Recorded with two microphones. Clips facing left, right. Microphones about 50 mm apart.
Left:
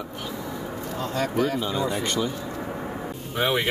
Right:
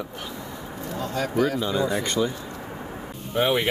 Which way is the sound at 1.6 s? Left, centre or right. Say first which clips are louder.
Right 2 dB; centre.